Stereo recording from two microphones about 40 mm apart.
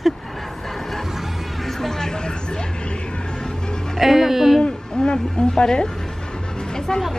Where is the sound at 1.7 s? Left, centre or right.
Centre.